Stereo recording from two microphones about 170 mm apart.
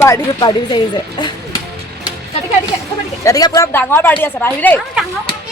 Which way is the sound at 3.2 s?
20° left (ahead or behind).